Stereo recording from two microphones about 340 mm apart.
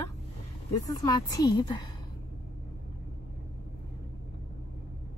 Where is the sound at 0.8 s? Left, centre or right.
Centre.